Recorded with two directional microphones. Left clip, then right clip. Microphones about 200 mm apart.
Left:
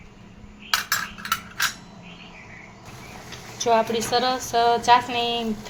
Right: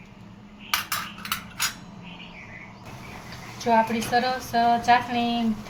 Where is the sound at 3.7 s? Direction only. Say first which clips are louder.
Left 1 dB; 35° left (ahead or behind).